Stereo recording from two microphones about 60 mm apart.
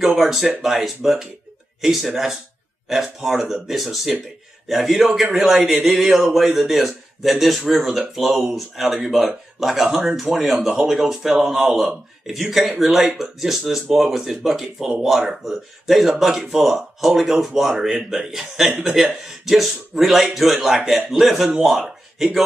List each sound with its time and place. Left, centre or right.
0.0 s speech: centre
18.7 s speech: right
18.9 s speech: centre